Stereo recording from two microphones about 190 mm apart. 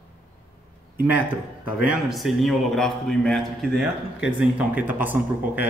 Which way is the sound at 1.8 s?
Centre (ahead or behind).